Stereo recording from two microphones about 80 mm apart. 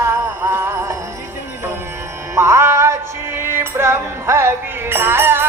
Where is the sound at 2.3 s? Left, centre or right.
Right.